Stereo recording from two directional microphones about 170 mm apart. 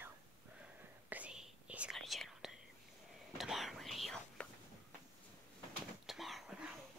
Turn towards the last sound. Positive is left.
turn(degrees=-5)  # may be behind; listen again after turning